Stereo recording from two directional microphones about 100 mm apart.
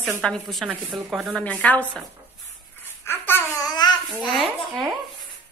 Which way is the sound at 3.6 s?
40° left (ahead or behind).